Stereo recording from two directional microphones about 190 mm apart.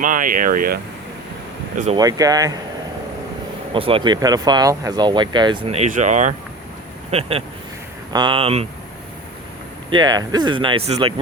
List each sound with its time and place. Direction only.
0.0 s speech: 45° right (ahead or behind)
2.0 s speech: 20° right (ahead or behind)
3.7 s speech: 30° right (ahead or behind)
9.9 s speech: 20° right (ahead or behind)